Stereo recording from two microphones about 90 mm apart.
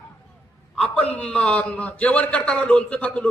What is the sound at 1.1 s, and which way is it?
A man's voice, 15° left (ahead or behind).